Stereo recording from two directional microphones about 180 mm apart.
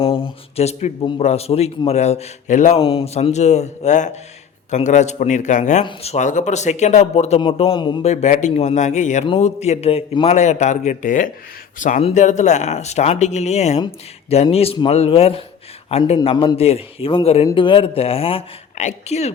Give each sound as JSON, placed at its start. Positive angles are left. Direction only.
{"t": 0.0, "sound": "a man's voice", "side_deg": 30}
{"t": 8.0, "sound": "a man's voice", "side_deg": 40}
{"t": 16.1, "sound": "a man's voice", "side_deg": 25}